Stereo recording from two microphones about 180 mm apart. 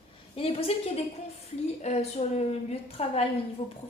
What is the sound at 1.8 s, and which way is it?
A woman's voice, 40° left (ahead or behind).